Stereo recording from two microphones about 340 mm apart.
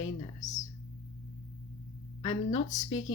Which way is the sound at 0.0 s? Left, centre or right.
Left.